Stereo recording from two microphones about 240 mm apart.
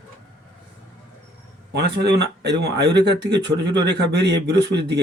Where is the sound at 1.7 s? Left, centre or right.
Right.